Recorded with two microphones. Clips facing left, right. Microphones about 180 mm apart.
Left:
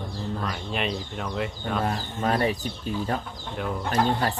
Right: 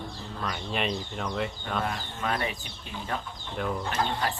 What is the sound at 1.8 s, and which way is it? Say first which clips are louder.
Speech: left 5 dB; 35° left (ahead or behind).